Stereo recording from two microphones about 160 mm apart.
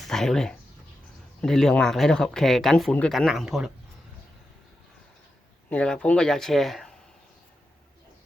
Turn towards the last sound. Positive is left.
turn(degrees=0)  # may be behind; listen again after turning